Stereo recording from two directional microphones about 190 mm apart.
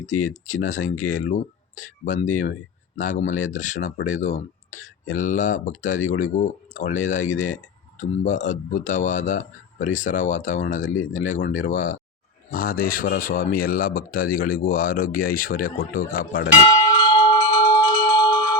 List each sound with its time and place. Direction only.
0.0 s speech: 40° left (ahead or behind)
16.6 s bell: 25° left (ahead or behind)